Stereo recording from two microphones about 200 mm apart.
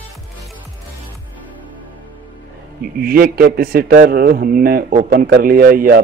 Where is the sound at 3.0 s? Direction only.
45° right (ahead or behind).